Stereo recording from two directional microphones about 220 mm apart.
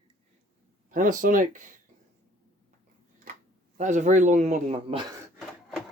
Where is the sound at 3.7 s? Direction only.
35° right (ahead or behind).